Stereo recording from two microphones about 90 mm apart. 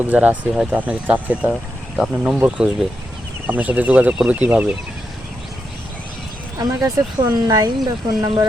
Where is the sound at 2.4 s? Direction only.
10° right (ahead or behind).